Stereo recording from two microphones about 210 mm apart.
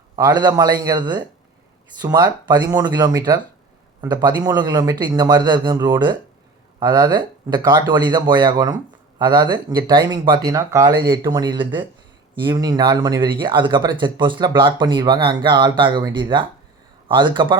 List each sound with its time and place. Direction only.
0.2 s speech: 20° right (ahead or behind)